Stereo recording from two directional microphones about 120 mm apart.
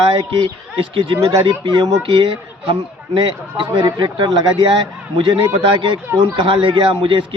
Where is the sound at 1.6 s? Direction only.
35° right (ahead or behind).